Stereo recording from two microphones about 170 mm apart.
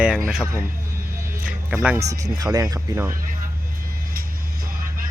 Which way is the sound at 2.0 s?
20° right (ahead or behind).